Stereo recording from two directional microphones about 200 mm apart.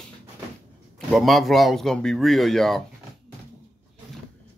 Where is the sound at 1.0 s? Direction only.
Centre (ahead or behind).